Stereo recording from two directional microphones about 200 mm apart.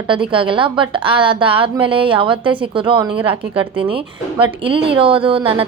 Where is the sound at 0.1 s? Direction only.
25° right (ahead or behind).